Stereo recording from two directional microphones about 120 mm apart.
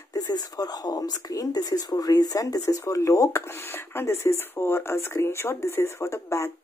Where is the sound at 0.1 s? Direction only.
30° left (ahead or behind).